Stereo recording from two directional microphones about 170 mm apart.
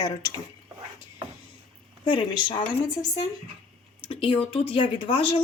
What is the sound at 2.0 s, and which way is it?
Speech, 30° left (ahead or behind).